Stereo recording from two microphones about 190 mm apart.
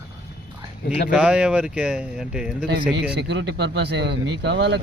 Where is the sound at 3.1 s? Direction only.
65° right (ahead or behind).